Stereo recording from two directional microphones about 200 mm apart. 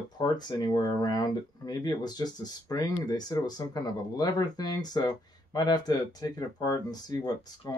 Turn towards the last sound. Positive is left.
turn(degrees=20)  # may be behind; listen again after turning